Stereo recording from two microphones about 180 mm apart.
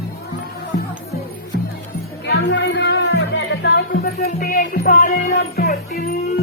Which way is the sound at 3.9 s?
55° left (ahead or behind).